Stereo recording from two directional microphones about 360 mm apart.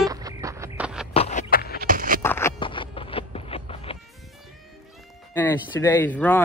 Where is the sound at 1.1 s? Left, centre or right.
Centre.